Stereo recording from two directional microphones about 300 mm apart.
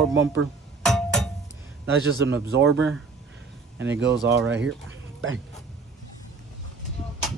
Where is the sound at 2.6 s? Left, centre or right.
Right.